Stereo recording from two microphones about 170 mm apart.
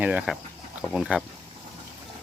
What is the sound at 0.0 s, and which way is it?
Speech, 5° right (ahead or behind).